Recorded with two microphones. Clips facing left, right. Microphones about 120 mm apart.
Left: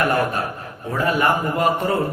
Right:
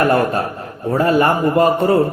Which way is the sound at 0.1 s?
35° right (ahead or behind).